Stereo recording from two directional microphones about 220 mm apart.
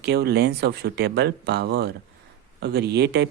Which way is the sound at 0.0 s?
50° right (ahead or behind).